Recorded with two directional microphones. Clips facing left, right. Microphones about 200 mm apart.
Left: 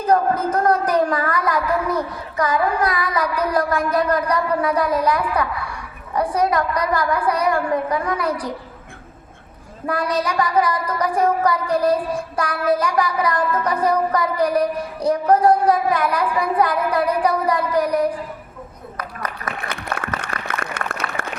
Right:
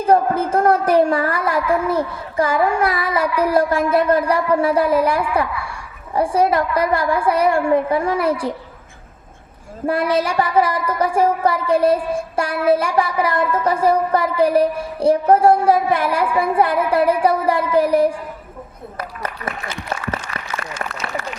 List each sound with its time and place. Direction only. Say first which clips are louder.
0.0 s child singing: right 2 dB; 25° right (ahead or behind)
9.8 s child singing: right 4 dB; 25° right (ahead or behind)
18.9 s speech: right 2 dB; 25° right (ahead or behind)
19.5 s speech: even; 60° left (ahead or behind)
20.2 s a sound: left 1 dB; 60° left (ahead or behind)